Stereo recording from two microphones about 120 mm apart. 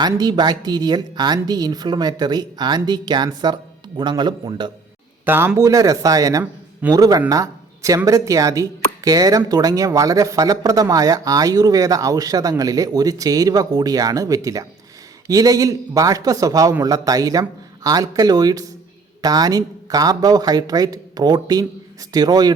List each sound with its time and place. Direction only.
0.2 s a woman's voice: 35° right (ahead or behind)
5.2 s speech: 15° right (ahead or behind)
5.5 s a woman's voice: 30° right (ahead or behind)